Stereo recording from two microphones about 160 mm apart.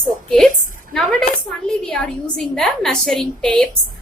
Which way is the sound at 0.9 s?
5° left (ahead or behind).